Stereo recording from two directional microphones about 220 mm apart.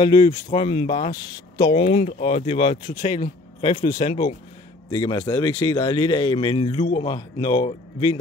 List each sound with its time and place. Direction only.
0.0 s a man's voice: 20° left (ahead or behind)
4.9 s a man's voice: 15° left (ahead or behind)